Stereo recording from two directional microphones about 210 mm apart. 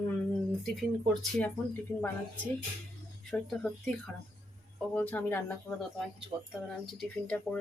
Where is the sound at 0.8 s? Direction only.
Centre (ahead or behind).